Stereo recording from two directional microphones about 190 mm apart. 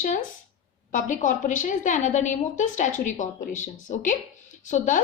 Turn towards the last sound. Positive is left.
turn(degrees=40)  # may be behind; listen again after turning